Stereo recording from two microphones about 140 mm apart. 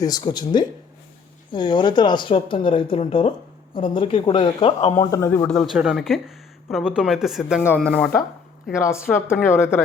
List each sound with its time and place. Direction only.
0.0 s speech: 30° left (ahead or behind)
4.8 s speech: 55° left (ahead or behind)
5.1 s a woman's voice: 20° left (ahead or behind)
5.5 s speech: centre (ahead or behind)
8.7 s a woman's voice: 20° left (ahead or behind)